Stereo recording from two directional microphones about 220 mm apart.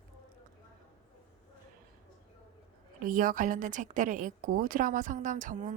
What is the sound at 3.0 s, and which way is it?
A woman's voice, 40° right (ahead or behind).